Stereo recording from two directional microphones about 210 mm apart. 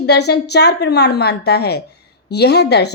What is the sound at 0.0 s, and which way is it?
A woman's voice, 55° left (ahead or behind).